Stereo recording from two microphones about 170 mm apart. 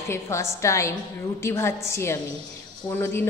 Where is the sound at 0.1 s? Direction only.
15° left (ahead or behind).